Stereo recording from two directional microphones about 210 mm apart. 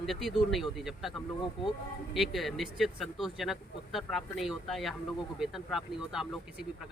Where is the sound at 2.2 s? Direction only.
Centre (ahead or behind).